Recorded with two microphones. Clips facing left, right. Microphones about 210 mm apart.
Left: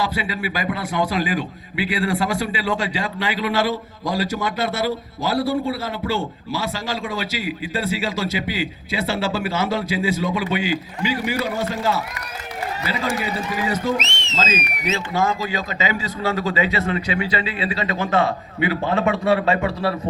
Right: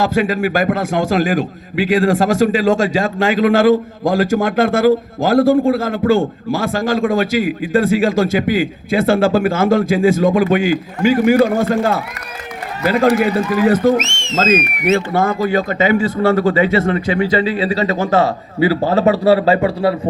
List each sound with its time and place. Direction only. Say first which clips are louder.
0.0 s a man's voice: right 9 dB; 45° right (ahead or behind); by 20.0 s 30° right (ahead or behind)